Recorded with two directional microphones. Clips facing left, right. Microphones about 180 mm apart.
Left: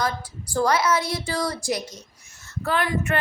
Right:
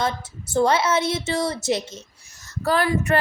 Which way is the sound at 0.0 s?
25° right (ahead or behind).